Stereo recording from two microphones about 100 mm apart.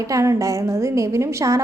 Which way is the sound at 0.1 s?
30° right (ahead or behind).